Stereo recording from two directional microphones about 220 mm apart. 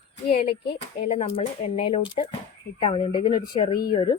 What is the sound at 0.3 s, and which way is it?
A woman's voice, 30° left (ahead or behind).